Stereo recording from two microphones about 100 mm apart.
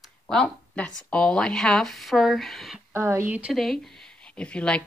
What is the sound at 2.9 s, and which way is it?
Speech, 25° right (ahead or behind).